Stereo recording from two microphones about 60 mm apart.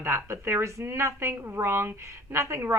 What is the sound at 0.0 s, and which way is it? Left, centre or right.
A woman's voice, right.